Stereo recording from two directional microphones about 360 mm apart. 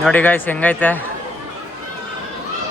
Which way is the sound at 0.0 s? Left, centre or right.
Centre.